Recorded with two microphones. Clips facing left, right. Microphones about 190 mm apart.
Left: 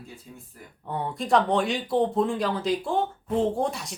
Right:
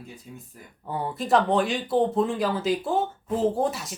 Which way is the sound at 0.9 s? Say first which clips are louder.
Right 1 dB; centre (ahead or behind).